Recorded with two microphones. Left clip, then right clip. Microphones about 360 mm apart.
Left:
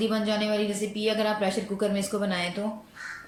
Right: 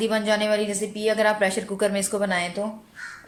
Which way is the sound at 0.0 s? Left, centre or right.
Centre.